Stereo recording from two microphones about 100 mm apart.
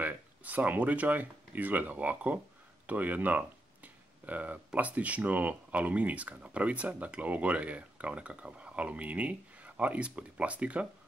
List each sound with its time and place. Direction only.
0.0 s speech: 15° right (ahead or behind)